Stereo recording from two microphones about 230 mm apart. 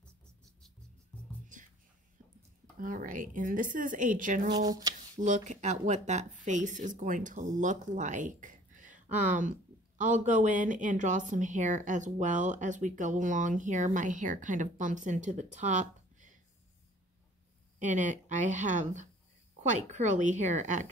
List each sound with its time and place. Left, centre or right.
1.5 s a sound: right
2.8 s speech: right
4.5 s speech: centre
5.2 s speech: right
17.7 s speech: right